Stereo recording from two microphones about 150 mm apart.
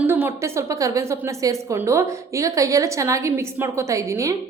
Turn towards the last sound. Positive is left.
turn(degrees=-20)  # may be behind; listen again after turning